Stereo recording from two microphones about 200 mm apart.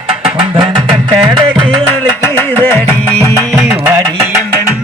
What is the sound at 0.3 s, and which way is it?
Music, 25° right (ahead or behind).